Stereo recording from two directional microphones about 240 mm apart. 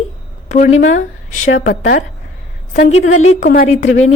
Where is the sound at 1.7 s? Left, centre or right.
Left.